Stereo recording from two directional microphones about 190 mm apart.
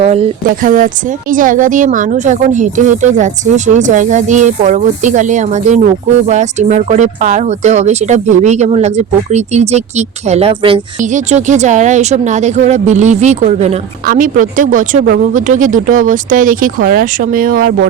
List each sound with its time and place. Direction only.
0.0 s speech: 35° right (ahead or behind)
0.4 s speech: 45° right (ahead or behind); by 10.8 s 30° right (ahead or behind)
11.1 s speech: 40° right (ahead or behind)